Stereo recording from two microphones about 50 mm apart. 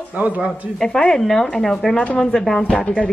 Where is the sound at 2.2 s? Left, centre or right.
Centre.